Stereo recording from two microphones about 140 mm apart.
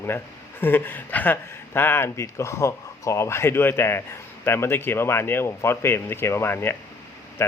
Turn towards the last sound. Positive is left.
turn(degrees=15)  # may be behind; listen again after turning